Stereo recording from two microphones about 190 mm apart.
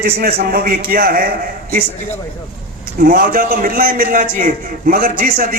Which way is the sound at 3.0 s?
50° right (ahead or behind).